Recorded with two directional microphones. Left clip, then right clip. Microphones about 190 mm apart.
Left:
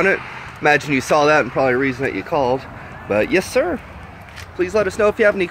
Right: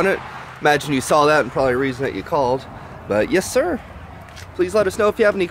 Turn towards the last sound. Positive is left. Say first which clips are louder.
# left 1 dB
turn(degrees=-5)  # may be behind; listen again after turning